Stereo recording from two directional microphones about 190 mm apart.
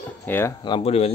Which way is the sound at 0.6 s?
30° left (ahead or behind).